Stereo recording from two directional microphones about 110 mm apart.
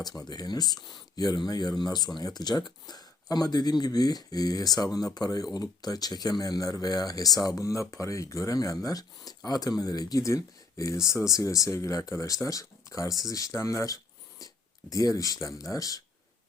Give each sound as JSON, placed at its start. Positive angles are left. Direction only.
{"t": 0.3, "sound": "speech", "side_deg": 35}